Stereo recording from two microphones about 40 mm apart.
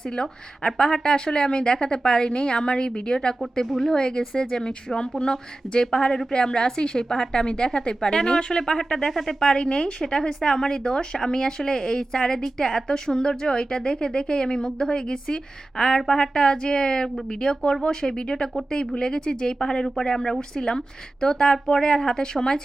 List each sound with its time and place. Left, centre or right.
0.2 s a woman's voice: centre